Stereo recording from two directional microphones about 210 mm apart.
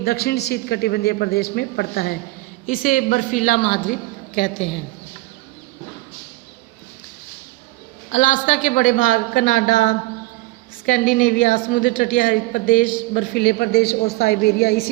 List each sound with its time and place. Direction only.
0.0 s a man's voice: 45° left (ahead or behind)
8.1 s a man's voice: 35° left (ahead or behind)